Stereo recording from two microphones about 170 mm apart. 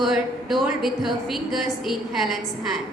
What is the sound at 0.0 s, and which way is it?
A woman's voice, centre (ahead or behind).